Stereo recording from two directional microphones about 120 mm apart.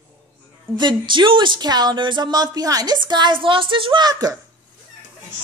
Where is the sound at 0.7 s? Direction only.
40° right (ahead or behind).